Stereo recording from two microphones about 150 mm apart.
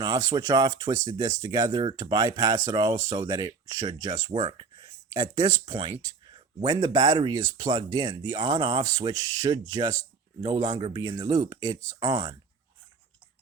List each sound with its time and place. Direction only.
0.0 s speech: 25° right (ahead or behind)